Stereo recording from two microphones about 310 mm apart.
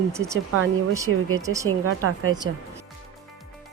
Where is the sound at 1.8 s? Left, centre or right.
Right.